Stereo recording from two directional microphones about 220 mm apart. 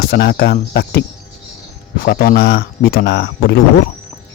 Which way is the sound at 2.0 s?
45° left (ahead or behind).